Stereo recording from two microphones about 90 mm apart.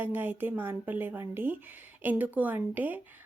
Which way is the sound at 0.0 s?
20° right (ahead or behind).